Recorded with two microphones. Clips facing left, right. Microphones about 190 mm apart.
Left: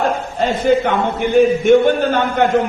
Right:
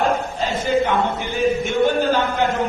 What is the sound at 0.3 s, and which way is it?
A man's voice, 55° left (ahead or behind).